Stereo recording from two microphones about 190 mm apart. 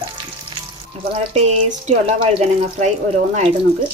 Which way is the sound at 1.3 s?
35° right (ahead or behind).